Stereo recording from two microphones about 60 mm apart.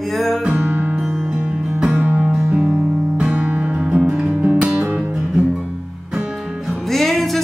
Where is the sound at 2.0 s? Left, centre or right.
Right.